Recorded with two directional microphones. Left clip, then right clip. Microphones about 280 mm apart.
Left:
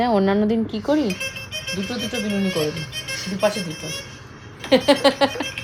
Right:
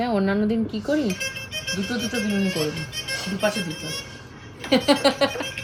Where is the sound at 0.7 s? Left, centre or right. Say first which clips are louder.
Left 3 dB; centre.